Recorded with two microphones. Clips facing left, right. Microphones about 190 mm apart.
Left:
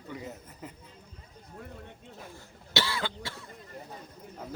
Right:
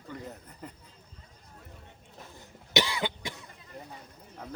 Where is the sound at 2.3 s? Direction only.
20° right (ahead or behind).